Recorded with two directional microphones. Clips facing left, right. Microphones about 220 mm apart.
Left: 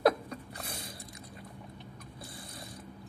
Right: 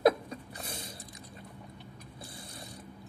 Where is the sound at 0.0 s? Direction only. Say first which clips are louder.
Right 2 dB; 20° right (ahead or behind).